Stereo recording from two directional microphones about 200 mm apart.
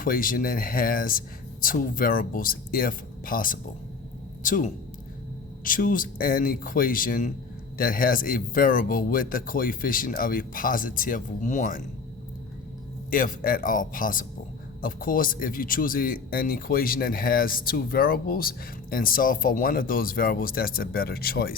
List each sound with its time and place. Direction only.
0.0 s speech: 45° left (ahead or behind)
13.1 s speech: 45° left (ahead or behind)